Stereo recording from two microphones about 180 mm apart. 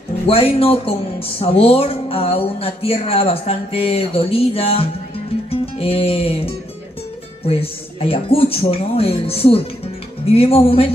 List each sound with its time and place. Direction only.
0.3 s speech: 30° left (ahead or behind)